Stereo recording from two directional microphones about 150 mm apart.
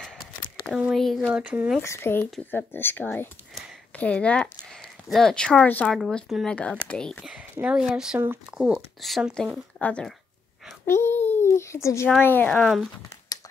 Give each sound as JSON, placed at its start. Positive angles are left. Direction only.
{"t": 0.0, "sound": "a sound", "side_deg": 0}
{"t": 1.8, "sound": "speech", "side_deg": 15}
{"t": 7.2, "sound": "a child's voice", "side_deg": -10}